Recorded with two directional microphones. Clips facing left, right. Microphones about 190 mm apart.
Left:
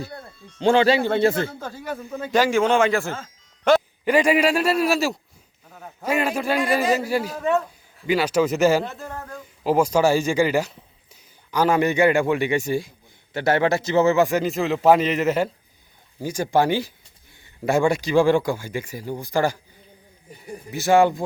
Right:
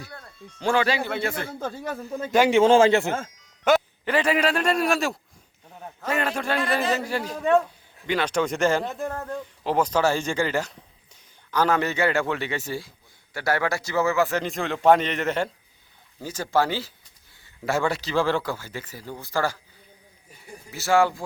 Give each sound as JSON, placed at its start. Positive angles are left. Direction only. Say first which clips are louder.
{"t": 0.6, "sound": "speech", "louder": "left 6 dB", "side_deg": 25}
{"t": 2.5, "sound": "a man's voice", "louder": "right 5 dB", "side_deg": -25}
{"t": 3.6, "sound": "music", "louder": "left 2 dB", "side_deg": 0}
{"t": 4.0, "sound": "speech", "louder": "left 4 dB", "side_deg": 10}
{"t": 14.3, "sound": "a man's voice", "louder": "left 5 dB", "side_deg": 5}
{"t": 20.7, "sound": "speech", "louder": "left 4 dB", "side_deg": 15}